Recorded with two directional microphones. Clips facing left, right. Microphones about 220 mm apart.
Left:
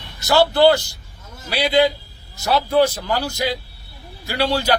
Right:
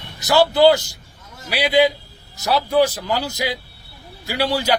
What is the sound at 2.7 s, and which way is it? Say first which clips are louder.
Speech: even; centre (ahead or behind).